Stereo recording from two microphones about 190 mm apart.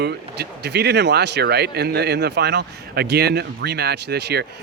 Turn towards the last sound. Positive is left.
turn(degrees=-60)  # may be behind; listen again after turning